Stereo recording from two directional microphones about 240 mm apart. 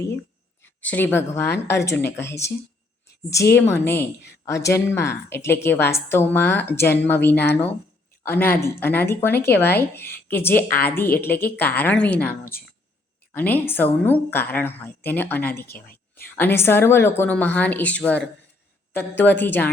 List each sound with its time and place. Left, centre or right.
0.8 s speech: centre
3.5 s speech: centre
12.3 s speech: left
13.3 s speech: centre
15.6 s speech: left
16.1 s speech: centre